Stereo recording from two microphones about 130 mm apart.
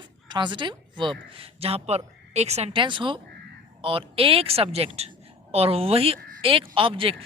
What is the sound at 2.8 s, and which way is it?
Speech, 40° right (ahead or behind).